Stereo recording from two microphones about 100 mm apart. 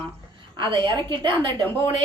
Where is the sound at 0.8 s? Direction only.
55° right (ahead or behind).